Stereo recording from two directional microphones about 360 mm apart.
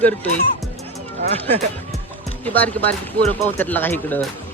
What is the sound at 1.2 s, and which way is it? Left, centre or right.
Speech, centre.